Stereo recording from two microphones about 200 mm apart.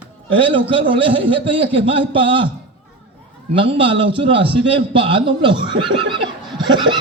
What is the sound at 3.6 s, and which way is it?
Speech, 25° right (ahead or behind).